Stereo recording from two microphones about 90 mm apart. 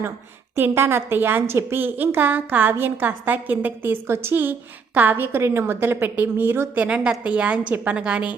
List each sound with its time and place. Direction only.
0.7 s a woman's voice: 25° right (ahead or behind)
6.8 s a woman's voice: 10° right (ahead or behind)